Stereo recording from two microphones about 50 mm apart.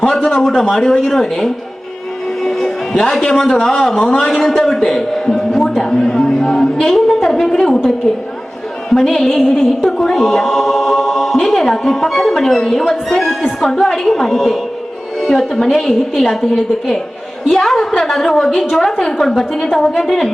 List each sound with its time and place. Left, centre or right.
0.2 s a woman's voice: centre
0.4 s a woman's voice: centre
2.4 s music: centre
2.9 s a woman's voice: centre
4.6 s a sound: centre
8.1 s a woman's voice: centre
8.9 s music: centre
11.3 s a woman's voice: centre